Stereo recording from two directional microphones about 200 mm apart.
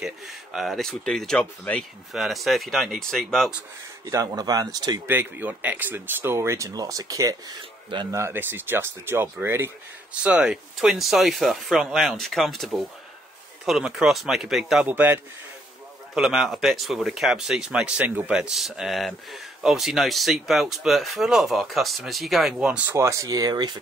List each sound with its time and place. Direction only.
0.0 s speech: centre (ahead or behind)
4.0 s speech: 15° right (ahead or behind)
16.2 s speech: centre (ahead or behind); by 23.8 s 20° right (ahead or behind)